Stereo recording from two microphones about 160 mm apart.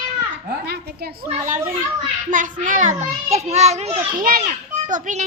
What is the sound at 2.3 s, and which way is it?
A child's voice, 55° right (ahead or behind).